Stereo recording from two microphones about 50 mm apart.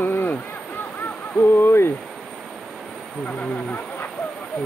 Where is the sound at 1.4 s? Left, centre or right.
Left.